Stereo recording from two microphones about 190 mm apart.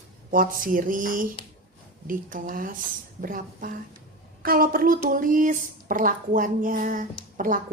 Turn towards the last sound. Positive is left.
turn(degrees=-45)  # may be behind; listen again after turning